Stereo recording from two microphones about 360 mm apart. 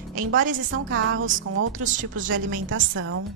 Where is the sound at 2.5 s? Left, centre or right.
Right.